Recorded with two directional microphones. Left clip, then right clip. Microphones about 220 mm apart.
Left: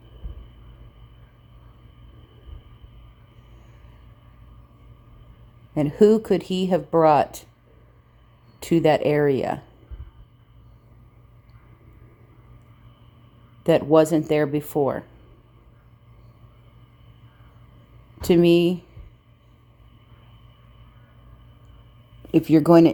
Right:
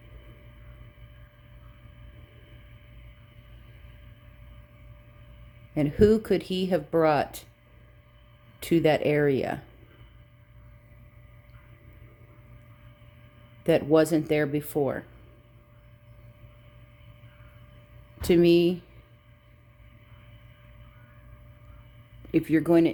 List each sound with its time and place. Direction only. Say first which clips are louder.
5.7 s speech: left 4 dB; 5° left (ahead or behind)
8.6 s speech: left 4 dB; 5° left (ahead or behind)
13.7 s speech: left 5 dB; 5° left (ahead or behind)
18.2 s speech: left 3 dB; 5° left (ahead or behind)
22.3 s speech: left 7 dB; 20° left (ahead or behind)